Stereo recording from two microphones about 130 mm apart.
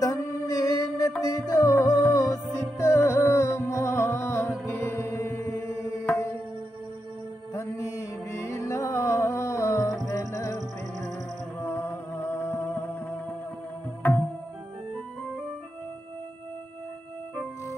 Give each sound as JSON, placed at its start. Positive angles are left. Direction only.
{"t": 0.0, "sound": "a sound", "side_deg": 30}
{"t": 1.2, "sound": "music", "side_deg": 25}
{"t": 7.5, "sound": "music", "side_deg": 20}
{"t": 11.6, "sound": "music", "side_deg": 20}